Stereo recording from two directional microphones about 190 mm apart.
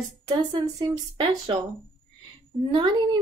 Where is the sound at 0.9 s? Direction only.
20° right (ahead or behind).